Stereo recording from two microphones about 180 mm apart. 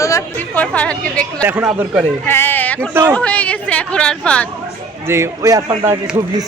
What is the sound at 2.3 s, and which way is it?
Speech, 10° left (ahead or behind).